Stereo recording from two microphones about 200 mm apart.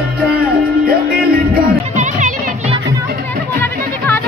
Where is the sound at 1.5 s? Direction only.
40° right (ahead or behind).